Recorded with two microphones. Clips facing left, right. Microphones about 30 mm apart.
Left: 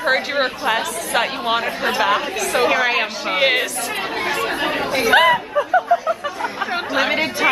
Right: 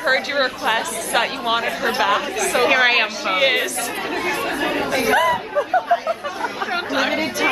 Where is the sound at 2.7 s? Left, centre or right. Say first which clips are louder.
Right 4 dB; centre.